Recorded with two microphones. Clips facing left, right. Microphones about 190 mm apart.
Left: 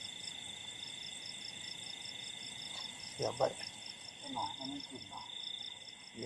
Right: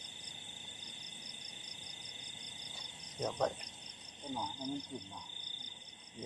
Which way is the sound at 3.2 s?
5° left (ahead or behind).